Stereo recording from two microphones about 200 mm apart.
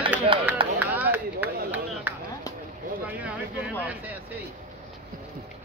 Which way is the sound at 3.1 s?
5° right (ahead or behind).